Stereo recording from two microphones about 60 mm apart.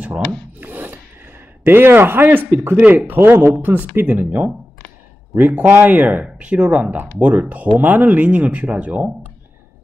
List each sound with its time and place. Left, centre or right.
0.0 s wood: right
1.6 s speech: right